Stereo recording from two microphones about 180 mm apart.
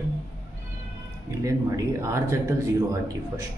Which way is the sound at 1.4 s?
15° right (ahead or behind).